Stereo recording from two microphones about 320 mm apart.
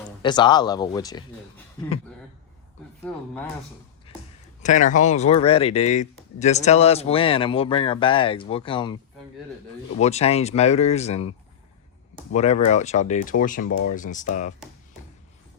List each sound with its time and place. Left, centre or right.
0.2 s speech: centre
3.1 s speech: centre
4.6 s speech: left
10.0 s speech: centre